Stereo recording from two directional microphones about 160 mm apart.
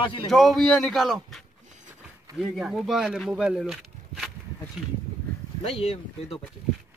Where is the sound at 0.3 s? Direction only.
Centre (ahead or behind).